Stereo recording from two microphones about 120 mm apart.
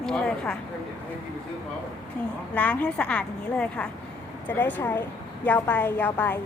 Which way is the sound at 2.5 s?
10° left (ahead or behind).